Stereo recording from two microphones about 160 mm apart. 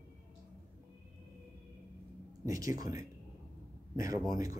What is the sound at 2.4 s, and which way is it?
Speech, 20° right (ahead or behind).